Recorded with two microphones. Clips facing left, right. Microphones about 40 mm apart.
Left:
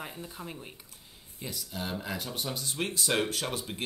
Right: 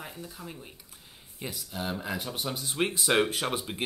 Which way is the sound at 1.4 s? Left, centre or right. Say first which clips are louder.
Right 2 dB; right.